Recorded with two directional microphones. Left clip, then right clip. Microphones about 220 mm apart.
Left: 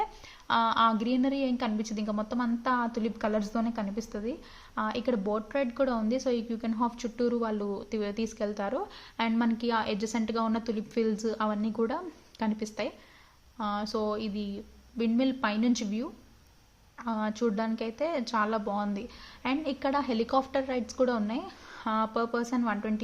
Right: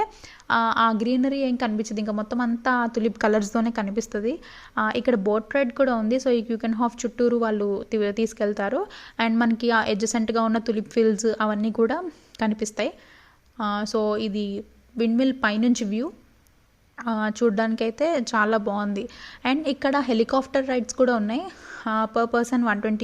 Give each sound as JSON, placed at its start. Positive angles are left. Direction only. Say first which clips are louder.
{"t": 0.0, "sound": "a woman's voice", "louder": "right 6 dB", "side_deg": -35}